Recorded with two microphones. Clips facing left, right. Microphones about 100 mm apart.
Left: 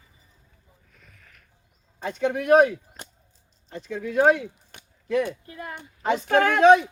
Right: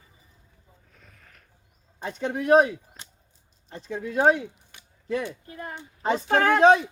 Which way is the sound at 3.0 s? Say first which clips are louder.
Left 5 dB; 45° left (ahead or behind).